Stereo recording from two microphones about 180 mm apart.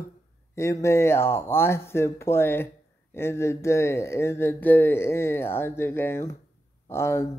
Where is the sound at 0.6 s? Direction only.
15° left (ahead or behind).